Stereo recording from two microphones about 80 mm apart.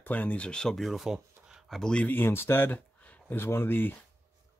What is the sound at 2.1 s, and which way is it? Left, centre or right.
Speech, left.